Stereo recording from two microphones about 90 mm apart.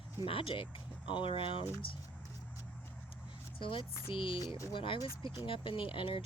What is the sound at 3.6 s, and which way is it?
Speech, 70° left (ahead or behind).